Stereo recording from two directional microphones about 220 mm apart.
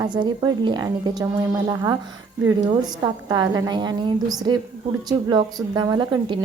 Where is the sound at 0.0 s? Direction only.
20° right (ahead or behind).